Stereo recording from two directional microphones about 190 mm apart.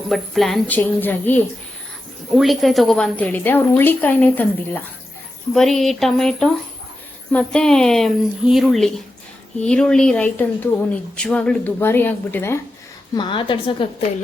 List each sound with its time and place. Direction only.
0.1 s a woman's voice: centre (ahead or behind)
13.1 s a woman's voice: 25° left (ahead or behind)